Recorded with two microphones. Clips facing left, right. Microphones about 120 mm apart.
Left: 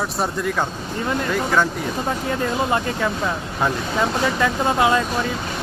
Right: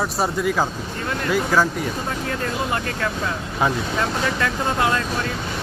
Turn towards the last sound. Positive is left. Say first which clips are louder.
# left 3 dB
turn(degrees=20)  # may be behind; listen again after turning